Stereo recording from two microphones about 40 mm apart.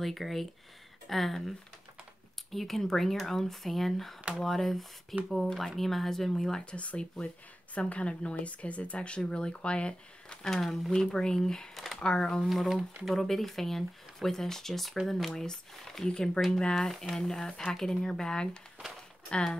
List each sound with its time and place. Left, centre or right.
0.0 s speech: centre
2.5 s a woman's voice: centre
6.6 s speech: left
10.4 s a woman's voice: centre
11.0 s a woman's voice: centre
11.7 s a sound: centre
12.0 s speech: left
12.4 s a woman's voice: centre; by 19.5 s left